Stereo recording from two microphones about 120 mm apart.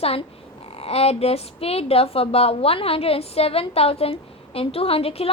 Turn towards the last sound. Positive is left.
turn(degrees=55)  # may be behind; listen again after turning